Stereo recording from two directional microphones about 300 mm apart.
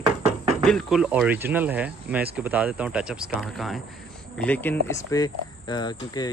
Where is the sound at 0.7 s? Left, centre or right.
Centre.